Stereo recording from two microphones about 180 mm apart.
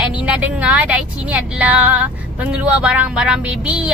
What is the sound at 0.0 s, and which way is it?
Speech, 5° right (ahead or behind).